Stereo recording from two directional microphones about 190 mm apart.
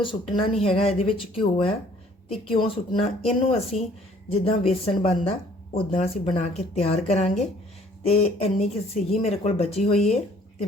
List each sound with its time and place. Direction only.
0.0 s speech: 25° left (ahead or behind)